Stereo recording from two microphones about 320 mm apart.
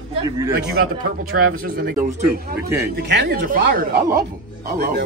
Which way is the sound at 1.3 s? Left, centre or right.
Right.